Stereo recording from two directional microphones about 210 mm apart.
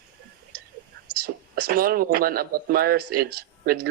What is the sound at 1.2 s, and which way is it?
A man's voice, 45° right (ahead or behind).